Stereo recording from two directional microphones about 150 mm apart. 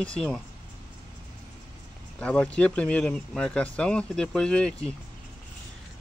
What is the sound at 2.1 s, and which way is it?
Speech, 10° left (ahead or behind).